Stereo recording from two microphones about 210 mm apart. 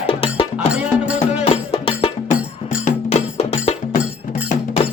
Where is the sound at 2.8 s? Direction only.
30° left (ahead or behind).